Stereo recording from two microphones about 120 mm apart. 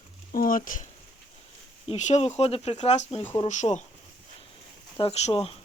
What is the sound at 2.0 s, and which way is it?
Speech, 75° left (ahead or behind).